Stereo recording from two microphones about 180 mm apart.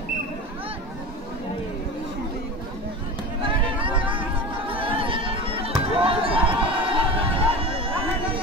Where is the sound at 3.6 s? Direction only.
30° right (ahead or behind).